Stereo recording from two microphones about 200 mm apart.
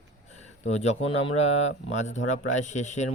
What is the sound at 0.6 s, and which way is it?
Speech, 35° left (ahead or behind).